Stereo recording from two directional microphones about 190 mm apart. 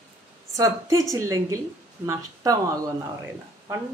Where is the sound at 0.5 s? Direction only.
15° right (ahead or behind).